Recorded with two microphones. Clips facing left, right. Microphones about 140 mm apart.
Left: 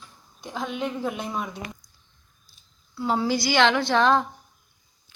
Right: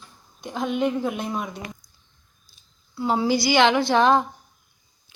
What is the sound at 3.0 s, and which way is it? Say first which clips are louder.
A woman's voice: right 2 dB; 5° right (ahead or behind).